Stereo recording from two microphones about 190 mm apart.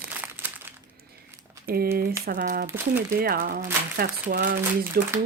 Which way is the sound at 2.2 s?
45° right (ahead or behind).